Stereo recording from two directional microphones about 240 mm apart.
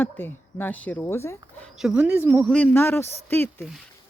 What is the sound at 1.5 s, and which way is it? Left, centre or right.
Speech, centre.